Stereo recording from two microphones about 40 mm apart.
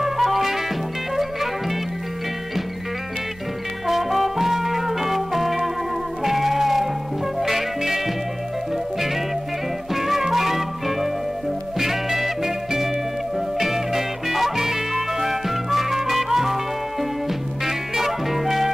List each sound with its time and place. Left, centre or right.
0.0 s music: centre
3.8 s music: centre
9.9 s music: centre
17.6 s music: centre